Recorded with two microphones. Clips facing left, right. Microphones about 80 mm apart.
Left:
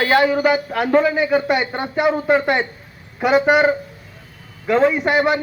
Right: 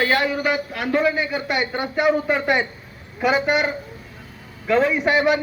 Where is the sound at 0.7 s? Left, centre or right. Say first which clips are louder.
Left 4 dB; left.